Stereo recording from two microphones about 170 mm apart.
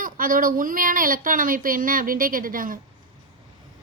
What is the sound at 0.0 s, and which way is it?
A woman's voice, 55° right (ahead or behind).